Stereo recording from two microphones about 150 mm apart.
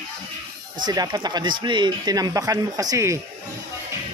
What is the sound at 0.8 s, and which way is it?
Speech, 25° right (ahead or behind).